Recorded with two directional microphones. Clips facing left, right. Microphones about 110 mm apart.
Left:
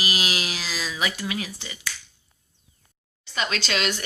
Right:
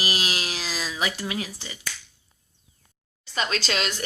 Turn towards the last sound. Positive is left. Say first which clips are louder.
# left 1 dB
turn(degrees=-35)  # may be behind; listen again after turning